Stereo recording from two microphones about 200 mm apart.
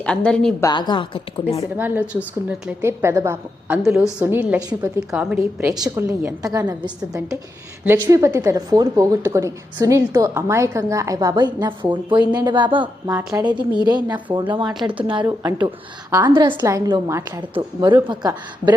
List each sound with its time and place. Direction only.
0.0 s a woman's voice: 5° left (ahead or behind)
0.6 s a woman's voice: 20° left (ahead or behind)
1.7 s a woman's voice: 10° right (ahead or behind)
3.8 s a woman's voice: centre (ahead or behind)
5.5 s a woman's voice: 15° right (ahead or behind)
8.0 s a woman's voice: 15° right (ahead or behind)